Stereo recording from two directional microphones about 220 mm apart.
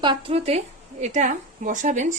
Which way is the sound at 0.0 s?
20° right (ahead or behind).